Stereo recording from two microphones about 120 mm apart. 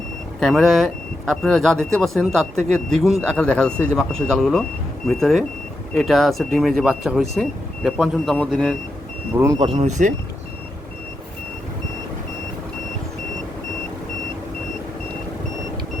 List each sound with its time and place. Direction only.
0.3 s speech: centre (ahead or behind)
9.6 s speech: 45° right (ahead or behind)